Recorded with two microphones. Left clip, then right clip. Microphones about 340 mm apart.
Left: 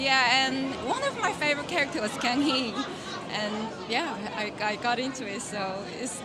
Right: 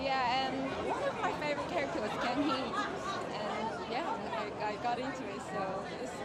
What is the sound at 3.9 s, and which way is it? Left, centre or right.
Speech, left.